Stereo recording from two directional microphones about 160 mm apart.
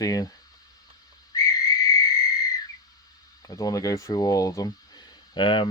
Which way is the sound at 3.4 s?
25° left (ahead or behind).